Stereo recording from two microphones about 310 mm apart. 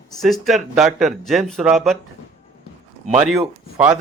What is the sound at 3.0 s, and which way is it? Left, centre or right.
Speech, centre.